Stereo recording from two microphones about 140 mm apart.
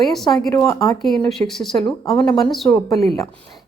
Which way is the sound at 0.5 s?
20° left (ahead or behind).